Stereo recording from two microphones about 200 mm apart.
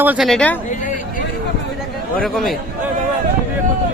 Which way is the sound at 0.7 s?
40° left (ahead or behind).